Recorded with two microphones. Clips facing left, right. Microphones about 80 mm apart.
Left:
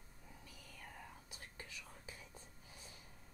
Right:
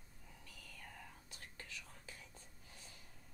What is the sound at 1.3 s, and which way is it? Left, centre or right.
Whispering, centre.